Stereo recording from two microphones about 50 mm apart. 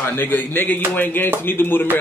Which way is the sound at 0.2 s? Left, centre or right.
Left.